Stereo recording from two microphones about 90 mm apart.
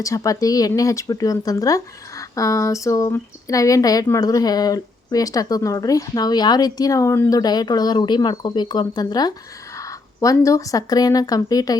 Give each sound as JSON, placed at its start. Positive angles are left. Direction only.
{"t": 0.0, "sound": "speech", "side_deg": 40}
{"t": 10.2, "sound": "speech", "side_deg": 35}